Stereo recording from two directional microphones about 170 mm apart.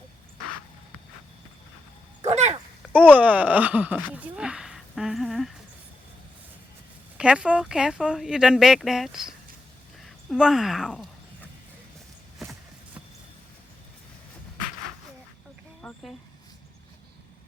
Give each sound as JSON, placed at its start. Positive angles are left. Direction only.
{"t": 2.3, "sound": "dog", "side_deg": -40}
{"t": 2.9, "sound": "speech", "side_deg": -10}
{"t": 7.2, "sound": "speech", "side_deg": -5}
{"t": 15.8, "sound": "a sound", "side_deg": 5}